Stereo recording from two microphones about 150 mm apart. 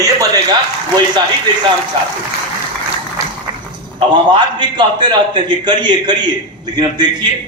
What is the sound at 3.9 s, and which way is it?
A man's voice, 30° right (ahead or behind).